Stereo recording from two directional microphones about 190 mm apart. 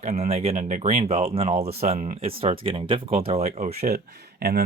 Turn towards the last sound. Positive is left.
turn(degrees=-55)  # may be behind; listen again after turning